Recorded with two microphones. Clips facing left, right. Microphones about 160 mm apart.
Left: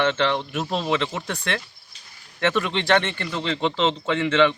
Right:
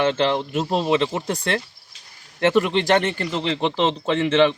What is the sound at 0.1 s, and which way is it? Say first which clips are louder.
A man's voice: right 3 dB; 35° right (ahead or behind).